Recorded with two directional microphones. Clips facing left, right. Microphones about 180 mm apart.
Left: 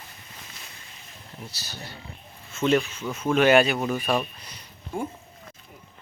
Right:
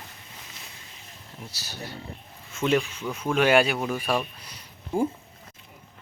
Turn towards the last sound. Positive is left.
turn(degrees=-30)  # may be behind; listen again after turning